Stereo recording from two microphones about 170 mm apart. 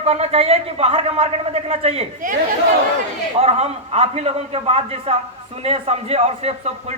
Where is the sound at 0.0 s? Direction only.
40° right (ahead or behind).